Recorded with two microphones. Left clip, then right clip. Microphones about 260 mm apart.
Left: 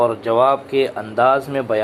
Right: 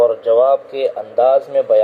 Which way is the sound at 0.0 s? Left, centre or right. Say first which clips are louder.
Right 3 dB; left.